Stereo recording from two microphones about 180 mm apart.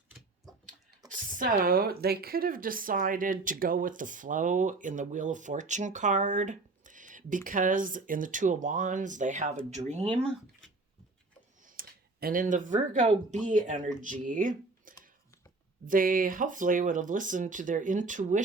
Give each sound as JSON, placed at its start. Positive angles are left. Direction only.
{"t": 1.1, "sound": "speech", "side_deg": -50}
{"t": 11.6, "sound": "speech", "side_deg": -50}